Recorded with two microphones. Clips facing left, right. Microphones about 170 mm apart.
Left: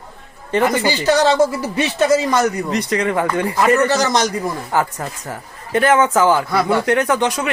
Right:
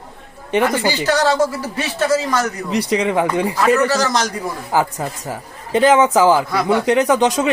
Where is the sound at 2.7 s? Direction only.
10° right (ahead or behind).